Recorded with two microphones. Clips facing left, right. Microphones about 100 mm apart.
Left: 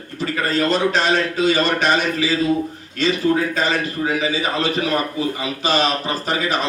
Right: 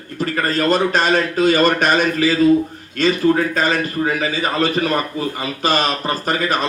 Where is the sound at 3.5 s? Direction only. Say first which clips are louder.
Right 2 dB; 50° right (ahead or behind).